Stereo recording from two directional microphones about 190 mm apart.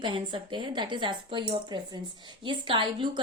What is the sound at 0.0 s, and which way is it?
Speech, 25° right (ahead or behind).